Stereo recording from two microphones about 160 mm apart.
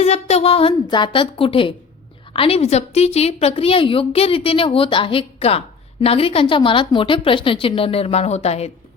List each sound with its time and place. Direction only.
0.0 s a woman's voice: 40° left (ahead or behind)